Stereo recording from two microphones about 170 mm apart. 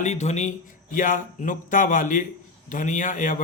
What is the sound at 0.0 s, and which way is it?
A man's voice, 40° left (ahead or behind).